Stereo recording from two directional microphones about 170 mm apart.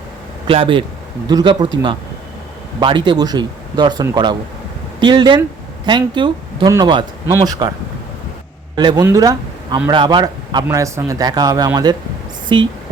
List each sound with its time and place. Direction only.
0.4 s a man's voice: 30° right (ahead or behind)
2.8 s a man's voice: 30° right (ahead or behind)
8.7 s a man's voice: 25° right (ahead or behind)